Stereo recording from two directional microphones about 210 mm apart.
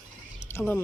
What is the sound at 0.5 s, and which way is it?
Speech, 10° left (ahead or behind).